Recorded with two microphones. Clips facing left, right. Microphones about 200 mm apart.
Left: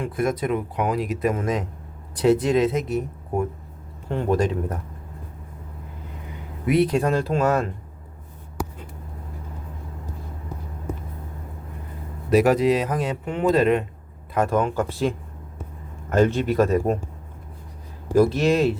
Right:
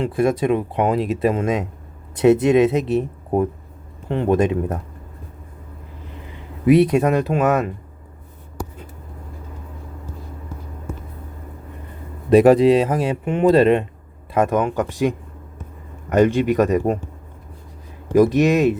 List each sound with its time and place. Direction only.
0.0 s speech: 25° right (ahead or behind)
6.9 s speech: 20° right (ahead or behind)
12.4 s speech: 30° right (ahead or behind); by 16.7 s 15° right (ahead or behind)
18.1 s speech: 15° right (ahead or behind)